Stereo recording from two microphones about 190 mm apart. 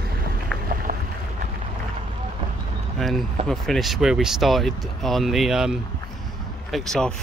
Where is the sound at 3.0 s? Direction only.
Centre (ahead or behind).